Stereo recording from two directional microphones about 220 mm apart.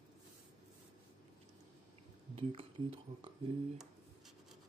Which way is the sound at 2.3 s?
25° right (ahead or behind).